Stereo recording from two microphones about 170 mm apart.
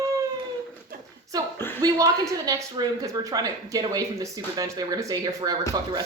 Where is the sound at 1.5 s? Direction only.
15° left (ahead or behind).